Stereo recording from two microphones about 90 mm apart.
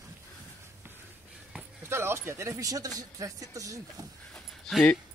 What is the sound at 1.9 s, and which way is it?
Speech, 25° right (ahead or behind).